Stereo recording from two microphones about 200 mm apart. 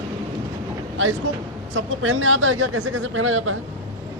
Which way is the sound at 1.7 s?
90° right.